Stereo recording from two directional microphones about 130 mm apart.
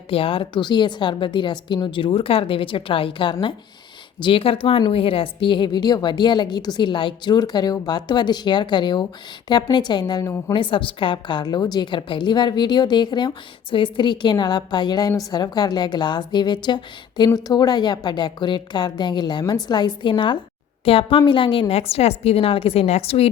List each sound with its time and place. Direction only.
0.1 s a woman's voice: 45° left (ahead or behind)
10.5 s a woman's voice: 40° left (ahead or behind)